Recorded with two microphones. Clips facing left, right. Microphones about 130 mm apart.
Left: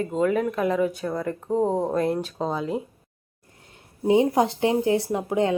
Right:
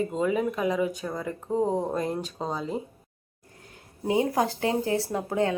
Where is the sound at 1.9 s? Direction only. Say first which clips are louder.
Left 5 dB; centre (ahead or behind).